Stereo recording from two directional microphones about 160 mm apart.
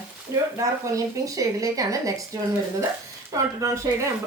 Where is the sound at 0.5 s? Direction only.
20° right (ahead or behind).